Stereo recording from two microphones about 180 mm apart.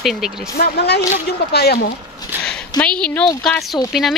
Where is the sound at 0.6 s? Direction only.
65° left (ahead or behind).